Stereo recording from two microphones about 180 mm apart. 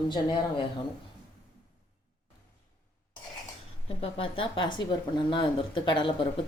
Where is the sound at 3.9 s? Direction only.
30° left (ahead or behind).